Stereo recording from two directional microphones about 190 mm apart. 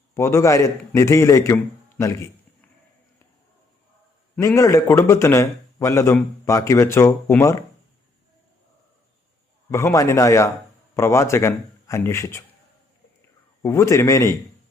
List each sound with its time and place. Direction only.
0.1 s a man's voice: 15° left (ahead or behind)
4.4 s a man's voice: 15° left (ahead or behind)
9.7 s a man's voice: 15° left (ahead or behind)
13.6 s a man's voice: 15° left (ahead or behind)